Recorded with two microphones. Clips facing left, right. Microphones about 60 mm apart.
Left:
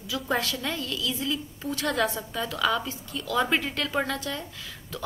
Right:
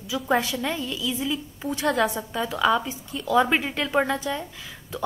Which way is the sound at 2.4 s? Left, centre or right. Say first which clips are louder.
Right 4 dB; centre.